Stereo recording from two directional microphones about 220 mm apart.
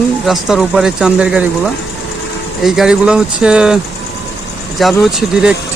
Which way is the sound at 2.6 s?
5° right (ahead or behind).